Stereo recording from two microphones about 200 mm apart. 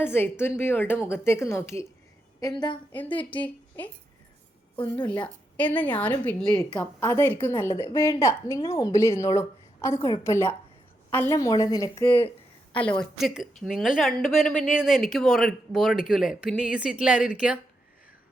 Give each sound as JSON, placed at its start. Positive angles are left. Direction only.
{"t": 0.0, "sound": "a woman's voice", "side_deg": 10}
{"t": 4.8, "sound": "a woman's voice", "side_deg": 10}